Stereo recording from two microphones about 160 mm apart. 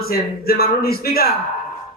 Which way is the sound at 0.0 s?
70° left (ahead or behind).